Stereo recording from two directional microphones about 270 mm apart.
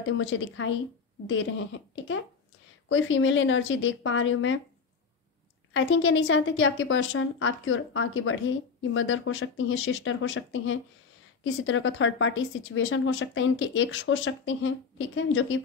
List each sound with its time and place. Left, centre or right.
0.1 s a woman's voice: left
5.7 s a woman's voice: left